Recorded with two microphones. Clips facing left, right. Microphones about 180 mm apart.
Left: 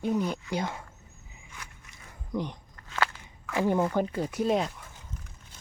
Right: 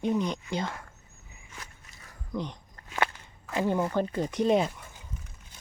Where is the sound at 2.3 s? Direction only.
15° left (ahead or behind).